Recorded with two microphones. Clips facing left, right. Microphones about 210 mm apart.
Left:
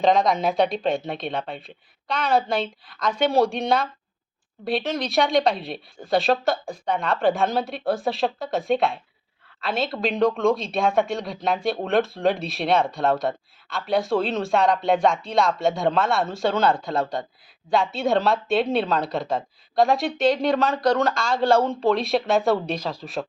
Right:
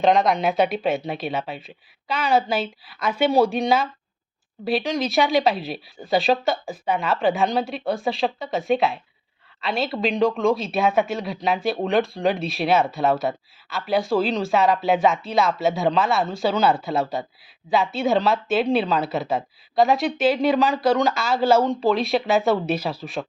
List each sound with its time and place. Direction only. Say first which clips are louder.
0.0 s speech: right 1 dB; centre (ahead or behind)